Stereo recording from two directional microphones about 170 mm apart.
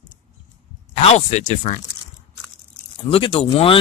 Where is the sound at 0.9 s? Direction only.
40° left (ahead or behind).